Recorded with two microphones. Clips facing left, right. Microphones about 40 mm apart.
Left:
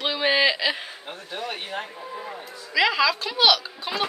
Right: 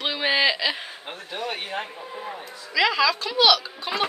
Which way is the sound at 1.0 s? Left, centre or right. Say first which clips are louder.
Right 2 dB; right.